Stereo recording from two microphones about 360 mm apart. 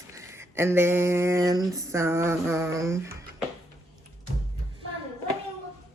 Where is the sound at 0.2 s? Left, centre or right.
Centre.